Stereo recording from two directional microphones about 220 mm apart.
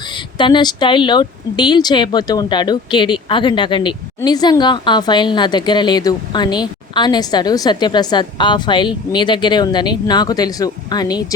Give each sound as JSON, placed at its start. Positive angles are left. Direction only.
{"t": 0.3, "sound": "speech", "side_deg": 20}